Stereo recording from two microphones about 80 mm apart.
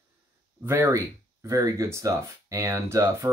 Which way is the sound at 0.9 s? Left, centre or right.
Right.